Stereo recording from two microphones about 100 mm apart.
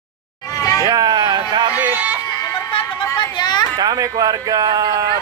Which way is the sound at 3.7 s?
40° right (ahead or behind).